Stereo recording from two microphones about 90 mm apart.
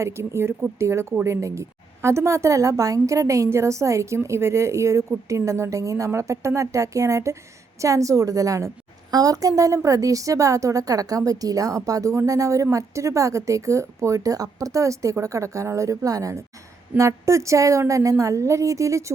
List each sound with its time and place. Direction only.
0.0 s a woman's voice: 30° right (ahead or behind)